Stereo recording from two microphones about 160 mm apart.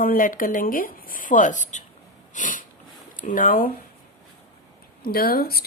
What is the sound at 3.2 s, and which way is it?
Speech, 55° left (ahead or behind).